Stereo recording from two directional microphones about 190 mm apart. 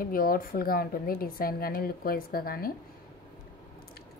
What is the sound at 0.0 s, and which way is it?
A woman's voice, 50° left (ahead or behind).